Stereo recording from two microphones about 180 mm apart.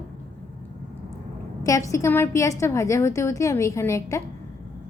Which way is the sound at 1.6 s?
20° left (ahead or behind).